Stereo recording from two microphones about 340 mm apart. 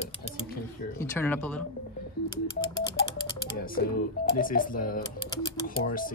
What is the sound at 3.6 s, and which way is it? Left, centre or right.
Speech, left.